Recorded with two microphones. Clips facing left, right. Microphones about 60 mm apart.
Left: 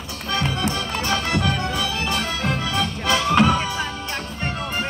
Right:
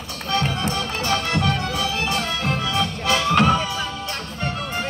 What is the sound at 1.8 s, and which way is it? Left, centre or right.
Music, right.